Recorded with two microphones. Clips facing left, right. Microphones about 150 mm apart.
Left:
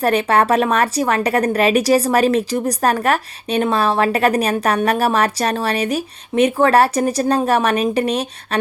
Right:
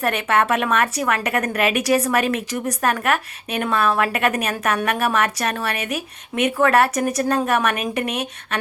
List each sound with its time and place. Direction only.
0.0 s a woman's voice: 35° left (ahead or behind)